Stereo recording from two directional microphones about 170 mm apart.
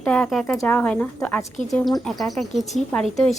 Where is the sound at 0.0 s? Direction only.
5° left (ahead or behind).